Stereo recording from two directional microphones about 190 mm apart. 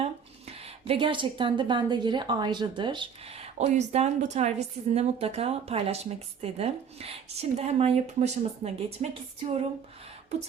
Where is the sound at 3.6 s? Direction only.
35° right (ahead or behind).